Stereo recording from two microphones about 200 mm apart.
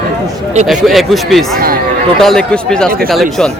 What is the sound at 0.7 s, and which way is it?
A man's voice, centre (ahead or behind).